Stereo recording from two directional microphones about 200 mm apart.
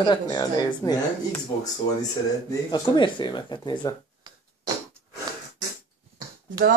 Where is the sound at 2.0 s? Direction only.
20° left (ahead or behind).